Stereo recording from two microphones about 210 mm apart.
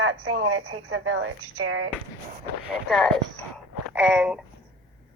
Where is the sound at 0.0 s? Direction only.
80° right.